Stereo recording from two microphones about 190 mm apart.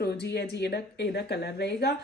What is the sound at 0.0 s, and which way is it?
A woman's voice, 60° left (ahead or behind).